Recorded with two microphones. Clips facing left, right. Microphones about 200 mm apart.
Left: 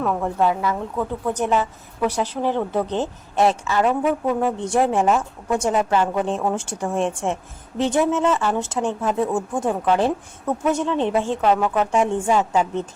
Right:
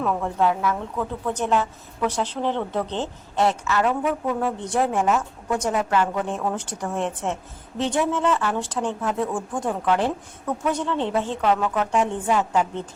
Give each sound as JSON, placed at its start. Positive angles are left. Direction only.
{"t": 0.2, "sound": "a woman's voice", "side_deg": 10}
{"t": 3.3, "sound": "a woman's voice", "side_deg": 25}
{"t": 12.3, "sound": "a woman's voice", "side_deg": 25}